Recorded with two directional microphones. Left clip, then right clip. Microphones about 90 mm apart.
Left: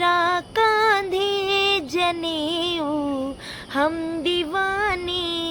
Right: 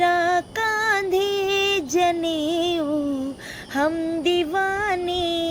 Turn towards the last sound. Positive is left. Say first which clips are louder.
# right 2 dB
turn(degrees=25)  # may be behind; listen again after turning